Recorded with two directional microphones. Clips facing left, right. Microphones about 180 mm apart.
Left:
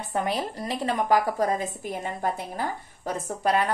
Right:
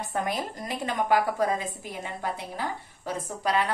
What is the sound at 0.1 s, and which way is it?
A woman's voice, 30° left (ahead or behind).